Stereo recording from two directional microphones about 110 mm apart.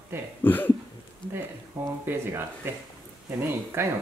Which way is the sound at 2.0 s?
20° right (ahead or behind).